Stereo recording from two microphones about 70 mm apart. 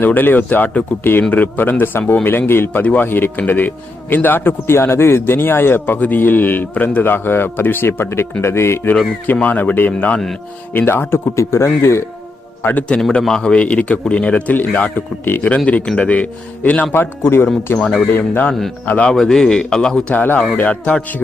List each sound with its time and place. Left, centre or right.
0.0 s a man's voice: left
12.6 s a man's voice: left
13.1 s a man's voice: centre; by 17.8 s left
18.9 s a man's voice: left
19.1 s a man's voice: centre
20.1 s a man's voice: left